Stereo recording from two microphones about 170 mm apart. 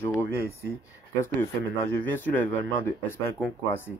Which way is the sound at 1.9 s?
10° left (ahead or behind).